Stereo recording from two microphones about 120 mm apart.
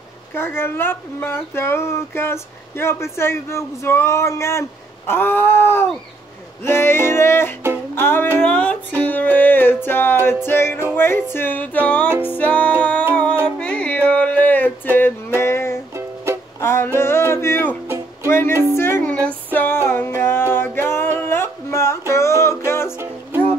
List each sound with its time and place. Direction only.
0.3 s speech: 20° left (ahead or behind)
7.9 s music: 20° left (ahead or behind)
10.2 s speech: 20° left (ahead or behind)
11.0 s music: 20° left (ahead or behind)
16.5 s speech: 20° left (ahead or behind)
19.2 s music: 15° left (ahead or behind)